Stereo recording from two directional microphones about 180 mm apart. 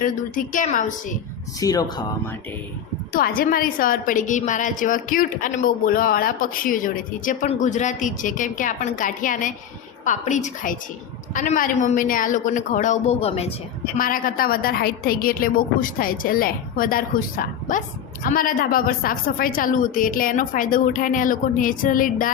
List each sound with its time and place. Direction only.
0.0 s a woman's voice: 45° left (ahead or behind)
1.5 s speech: 20° left (ahead or behind)
3.1 s a woman's voice: 50° left (ahead or behind); by 13.5 s 35° left (ahead or behind)
14.0 s a woman's voice: 50° left (ahead or behind)